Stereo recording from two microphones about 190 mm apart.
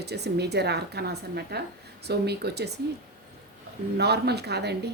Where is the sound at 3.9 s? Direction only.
60° right (ahead or behind).